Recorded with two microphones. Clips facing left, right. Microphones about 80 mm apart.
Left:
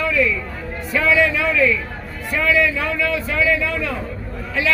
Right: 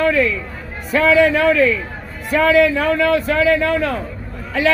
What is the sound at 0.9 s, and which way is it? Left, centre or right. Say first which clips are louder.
A man's voice: right 5 dB; right.